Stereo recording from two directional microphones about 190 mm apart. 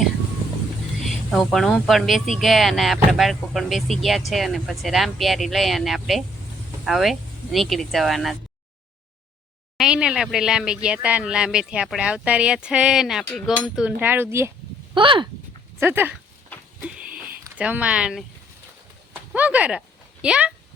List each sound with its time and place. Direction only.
1.0 s a woman's voice: centre (ahead or behind)
9.7 s speech: 5° right (ahead or behind)
14.9 s speech: 25° right (ahead or behind)
15.8 s speech: 10° right (ahead or behind)
16.8 s a sound: 5° right (ahead or behind)
19.3 s speech: 5° right (ahead or behind)